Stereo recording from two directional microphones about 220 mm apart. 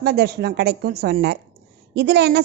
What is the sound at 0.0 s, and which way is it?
A woman's voice, 45° right (ahead or behind).